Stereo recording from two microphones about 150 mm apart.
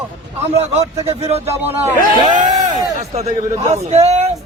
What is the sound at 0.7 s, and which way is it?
Speech, 45° right (ahead or behind).